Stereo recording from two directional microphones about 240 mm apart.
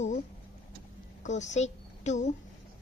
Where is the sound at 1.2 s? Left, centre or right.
Left.